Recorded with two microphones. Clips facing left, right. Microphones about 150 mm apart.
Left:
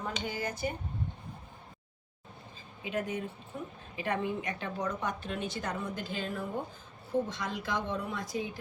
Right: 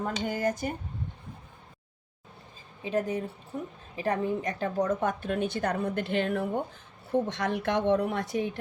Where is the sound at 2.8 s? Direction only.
35° right (ahead or behind).